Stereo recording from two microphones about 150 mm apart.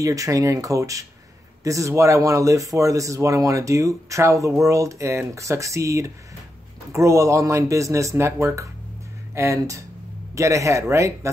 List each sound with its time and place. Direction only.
0.0 s a man's voice: 20° right (ahead or behind)